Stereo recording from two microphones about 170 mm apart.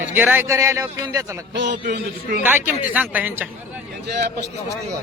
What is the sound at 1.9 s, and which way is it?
Speech, 75° right (ahead or behind).